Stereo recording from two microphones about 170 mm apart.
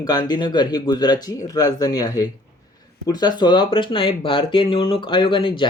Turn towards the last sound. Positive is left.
turn(degrees=30)  # may be behind; listen again after turning